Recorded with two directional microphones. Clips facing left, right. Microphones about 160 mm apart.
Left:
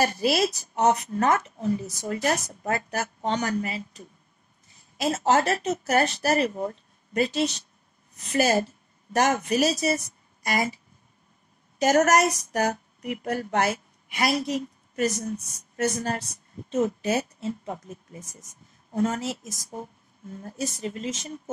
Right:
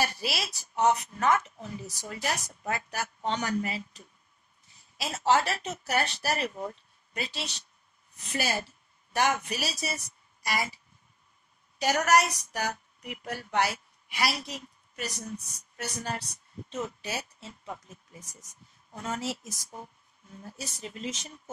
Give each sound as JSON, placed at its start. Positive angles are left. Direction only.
{"t": 0.0, "sound": "speech", "side_deg": 45}
{"t": 11.8, "sound": "speech", "side_deg": 45}